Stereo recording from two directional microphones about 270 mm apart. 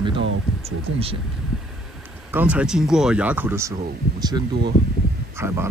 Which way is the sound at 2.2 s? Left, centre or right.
Centre.